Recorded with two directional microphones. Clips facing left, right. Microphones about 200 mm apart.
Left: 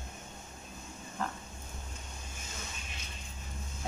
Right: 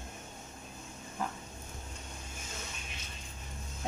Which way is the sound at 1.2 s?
10° right (ahead or behind).